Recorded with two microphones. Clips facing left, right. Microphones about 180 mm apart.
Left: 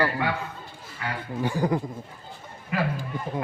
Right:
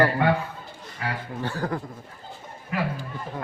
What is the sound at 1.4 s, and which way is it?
Speech, 15° left (ahead or behind).